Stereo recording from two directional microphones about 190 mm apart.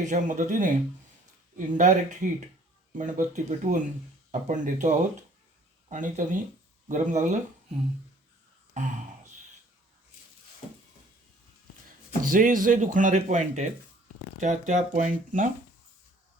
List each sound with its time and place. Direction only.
0.0 s speech: 40° right (ahead or behind)
8.7 s a sound: 40° right (ahead or behind)
12.2 s speech: 45° right (ahead or behind)